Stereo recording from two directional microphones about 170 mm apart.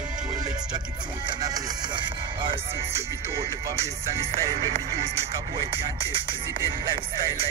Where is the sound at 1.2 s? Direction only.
25° right (ahead or behind).